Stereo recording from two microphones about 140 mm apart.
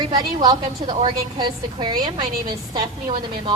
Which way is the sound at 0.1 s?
30° right (ahead or behind).